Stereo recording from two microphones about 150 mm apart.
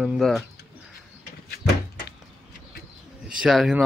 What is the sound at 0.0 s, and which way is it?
Speech, centre (ahead or behind).